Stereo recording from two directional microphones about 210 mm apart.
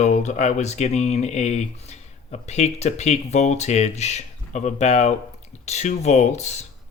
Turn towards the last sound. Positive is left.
turn(degrees=35)  # may be behind; listen again after turning